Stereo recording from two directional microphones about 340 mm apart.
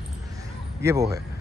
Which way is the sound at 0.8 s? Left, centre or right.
Centre.